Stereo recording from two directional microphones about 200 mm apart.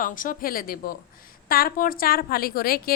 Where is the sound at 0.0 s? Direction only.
45° left (ahead or behind).